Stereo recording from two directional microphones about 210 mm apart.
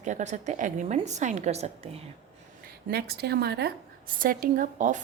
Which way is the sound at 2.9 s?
50° right (ahead or behind).